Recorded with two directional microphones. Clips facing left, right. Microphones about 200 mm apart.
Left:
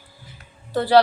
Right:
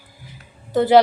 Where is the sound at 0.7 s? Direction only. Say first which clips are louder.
Right 5 dB; 20° right (ahead or behind).